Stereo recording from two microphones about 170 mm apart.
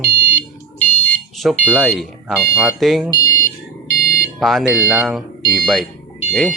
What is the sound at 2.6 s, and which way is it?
Speech, centre (ahead or behind).